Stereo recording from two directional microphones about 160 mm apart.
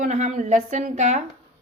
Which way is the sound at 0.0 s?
50° right (ahead or behind).